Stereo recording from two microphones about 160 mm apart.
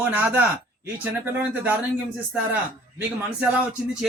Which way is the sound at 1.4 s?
10° right (ahead or behind).